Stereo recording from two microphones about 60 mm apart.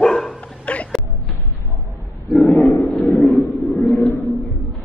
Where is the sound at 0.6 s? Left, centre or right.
Left.